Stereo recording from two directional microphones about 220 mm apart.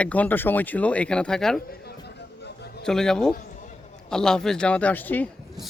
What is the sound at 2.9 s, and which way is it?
Speech, 5° left (ahead or behind).